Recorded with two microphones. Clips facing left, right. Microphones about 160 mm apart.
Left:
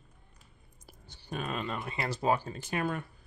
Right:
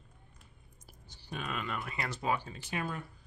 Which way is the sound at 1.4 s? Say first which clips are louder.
Left 3 dB; 35° left (ahead or behind).